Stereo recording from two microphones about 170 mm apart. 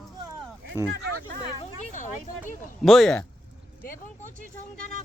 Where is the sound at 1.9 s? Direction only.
45° left (ahead or behind).